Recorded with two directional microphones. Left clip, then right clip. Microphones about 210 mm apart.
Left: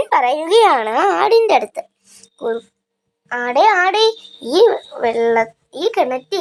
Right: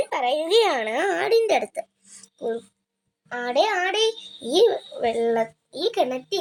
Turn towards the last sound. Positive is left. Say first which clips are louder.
# left 6 dB
turn(degrees=0)  # may be behind; listen again after turning